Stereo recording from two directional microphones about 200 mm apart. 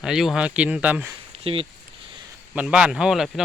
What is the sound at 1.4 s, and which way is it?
Speech, 25° right (ahead or behind).